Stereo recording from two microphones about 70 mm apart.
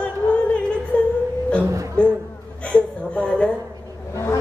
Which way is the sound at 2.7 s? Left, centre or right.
Centre.